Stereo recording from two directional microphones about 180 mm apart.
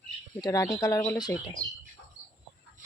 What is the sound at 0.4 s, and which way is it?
Speech, 20° left (ahead or behind).